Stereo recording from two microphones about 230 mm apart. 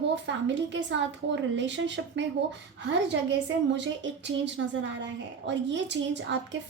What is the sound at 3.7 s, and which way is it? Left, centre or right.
A woman's voice, right.